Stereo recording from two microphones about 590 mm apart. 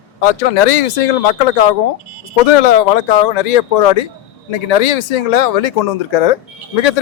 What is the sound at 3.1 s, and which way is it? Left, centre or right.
A man's voice, left.